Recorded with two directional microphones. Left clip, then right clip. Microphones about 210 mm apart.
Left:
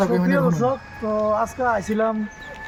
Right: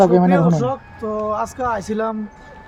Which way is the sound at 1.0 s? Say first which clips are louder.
Left 1 dB; 15° right (ahead or behind).